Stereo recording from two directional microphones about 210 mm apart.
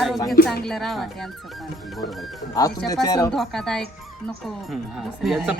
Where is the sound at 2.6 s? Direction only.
15° left (ahead or behind).